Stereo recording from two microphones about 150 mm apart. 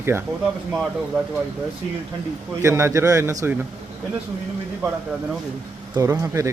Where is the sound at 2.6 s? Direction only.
20° right (ahead or behind).